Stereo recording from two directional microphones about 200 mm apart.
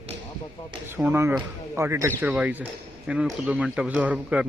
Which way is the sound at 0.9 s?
10° right (ahead or behind).